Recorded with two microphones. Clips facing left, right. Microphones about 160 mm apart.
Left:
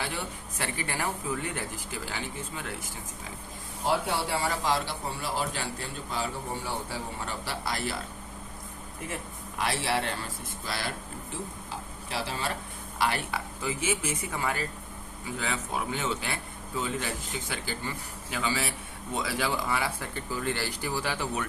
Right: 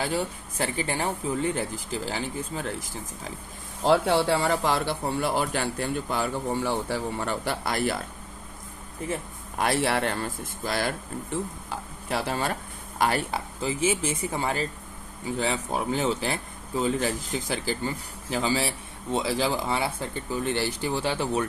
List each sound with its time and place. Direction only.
0.6 s speech: 30° right (ahead or behind)
3.8 s a man's voice: 65° right (ahead or behind)
9.6 s a man's voice: 55° right (ahead or behind)
11.7 s stir: 55° right (ahead or behind)
13.0 s speech: 40° right (ahead or behind)